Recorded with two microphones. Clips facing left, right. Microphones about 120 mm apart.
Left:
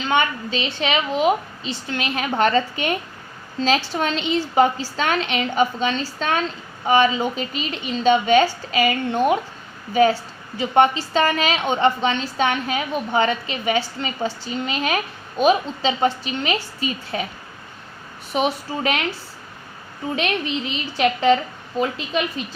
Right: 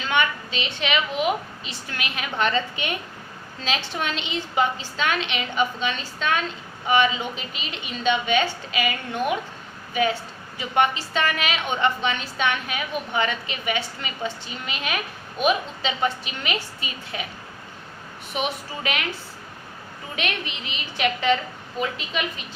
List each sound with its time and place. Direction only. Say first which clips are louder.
0.0 s a woman's voice: left 3 dB; 30° left (ahead or behind)
18.3 s a woman's voice: left 6 dB; 35° left (ahead or behind)
20.1 s a woman's voice: left 6 dB; 35° left (ahead or behind)